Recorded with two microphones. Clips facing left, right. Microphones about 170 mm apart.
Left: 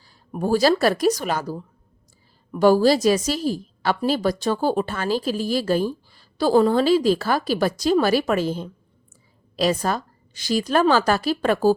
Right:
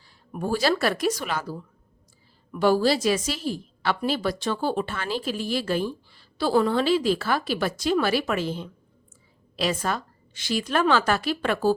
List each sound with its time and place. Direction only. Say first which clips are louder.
0.3 s a woman's voice: left 5 dB; 40° left (ahead or behind)